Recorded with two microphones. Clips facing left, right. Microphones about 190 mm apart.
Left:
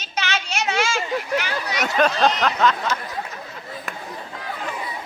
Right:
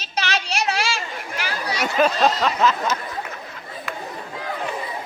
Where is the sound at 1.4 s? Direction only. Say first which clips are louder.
Even; 30° right (ahead or behind).